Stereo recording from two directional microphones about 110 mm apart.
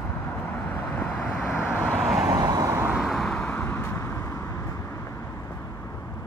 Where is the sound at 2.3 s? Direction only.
35° right (ahead or behind).